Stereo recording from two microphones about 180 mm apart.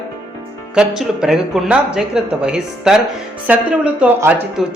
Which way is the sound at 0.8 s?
5° right (ahead or behind).